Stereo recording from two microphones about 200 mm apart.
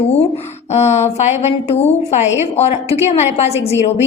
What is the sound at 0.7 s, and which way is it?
A woman's voice, 35° left (ahead or behind).